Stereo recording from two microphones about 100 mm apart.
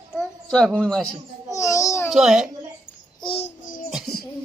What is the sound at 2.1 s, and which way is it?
Speech, 5° right (ahead or behind).